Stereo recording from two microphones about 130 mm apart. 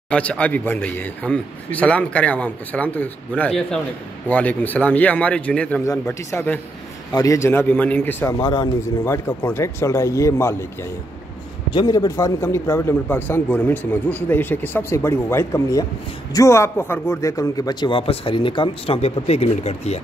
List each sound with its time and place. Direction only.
0.1 s a man's voice: 10° left (ahead or behind)
11.7 s a man's voice: 30° left (ahead or behind)
18.9 s speech: 50° left (ahead or behind)